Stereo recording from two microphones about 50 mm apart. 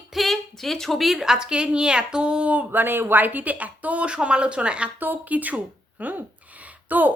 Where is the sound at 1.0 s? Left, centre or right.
Centre; by 2.7 s right.